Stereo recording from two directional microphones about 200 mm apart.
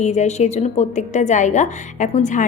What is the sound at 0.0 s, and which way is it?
A woman's voice, 35° left (ahead or behind).